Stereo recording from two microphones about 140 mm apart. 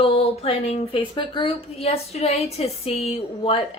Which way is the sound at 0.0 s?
45° left (ahead or behind).